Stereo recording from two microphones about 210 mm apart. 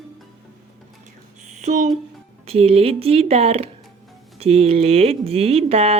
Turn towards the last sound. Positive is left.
turn(degrees=-30)  # may be behind; listen again after turning